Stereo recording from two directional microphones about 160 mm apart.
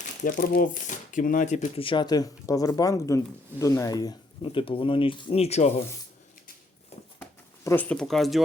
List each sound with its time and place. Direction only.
0.2 s speech: 55° left (ahead or behind); by 4.2 s 25° left (ahead or behind)
4.4 s speech: 35° left (ahead or behind)
7.6 s speech: 15° left (ahead or behind)